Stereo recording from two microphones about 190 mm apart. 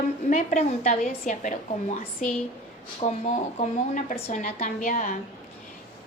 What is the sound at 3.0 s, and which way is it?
A woman's voice, 35° left (ahead or behind).